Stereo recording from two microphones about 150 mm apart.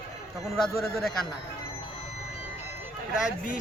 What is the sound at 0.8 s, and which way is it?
Speech, centre (ahead or behind).